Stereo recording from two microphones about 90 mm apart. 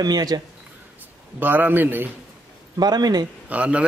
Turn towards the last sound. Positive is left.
turn(degrees=-15)  # may be behind; listen again after turning